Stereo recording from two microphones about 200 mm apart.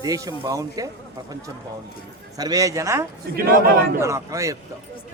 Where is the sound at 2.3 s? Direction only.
20° right (ahead or behind).